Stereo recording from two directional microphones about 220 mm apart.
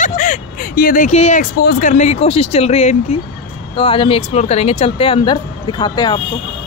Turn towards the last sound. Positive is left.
turn(degrees=20)  # may be behind; listen again after turning